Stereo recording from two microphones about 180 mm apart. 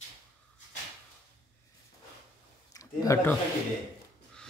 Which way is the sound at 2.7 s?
20° left (ahead or behind).